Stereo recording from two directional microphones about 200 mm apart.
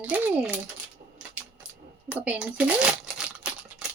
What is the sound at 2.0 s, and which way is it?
Crumpling, 10° right (ahead or behind).